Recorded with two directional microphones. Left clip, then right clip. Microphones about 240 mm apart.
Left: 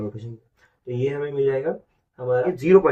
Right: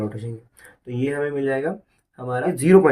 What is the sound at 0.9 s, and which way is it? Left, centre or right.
Speech, right.